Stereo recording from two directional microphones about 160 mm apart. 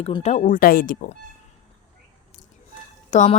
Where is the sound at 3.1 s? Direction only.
50° left (ahead or behind).